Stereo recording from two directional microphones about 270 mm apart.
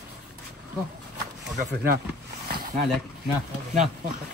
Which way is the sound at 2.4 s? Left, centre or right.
Right.